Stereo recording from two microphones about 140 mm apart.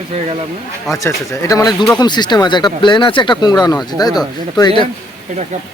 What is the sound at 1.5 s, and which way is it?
Speech, 30° left (ahead or behind).